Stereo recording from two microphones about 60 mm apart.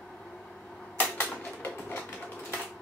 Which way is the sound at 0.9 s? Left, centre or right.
Left.